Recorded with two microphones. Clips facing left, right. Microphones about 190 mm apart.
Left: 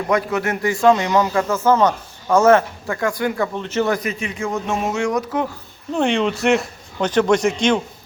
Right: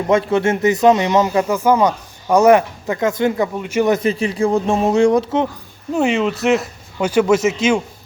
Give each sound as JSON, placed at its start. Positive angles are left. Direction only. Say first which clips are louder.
{"t": 0.1, "sound": "speech", "louder": "right 5 dB", "side_deg": -25}
{"t": 3.5, "sound": "speech", "louder": "right 4 dB", "side_deg": -10}
{"t": 3.9, "sound": "speech", "louder": "right 7 dB", "side_deg": -30}
{"t": 5.9, "sound": "speech", "louder": "right 2 dB", "side_deg": -5}